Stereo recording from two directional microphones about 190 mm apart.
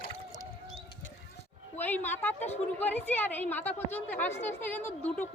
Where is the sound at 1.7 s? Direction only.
10° left (ahead or behind).